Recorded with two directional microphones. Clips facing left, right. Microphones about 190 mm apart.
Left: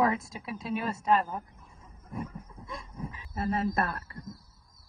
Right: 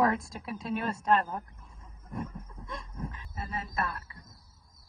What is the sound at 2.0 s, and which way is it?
Wild animals, 5° left (ahead or behind).